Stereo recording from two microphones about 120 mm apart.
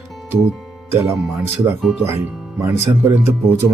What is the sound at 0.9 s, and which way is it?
Speech, 20° right (ahead or behind).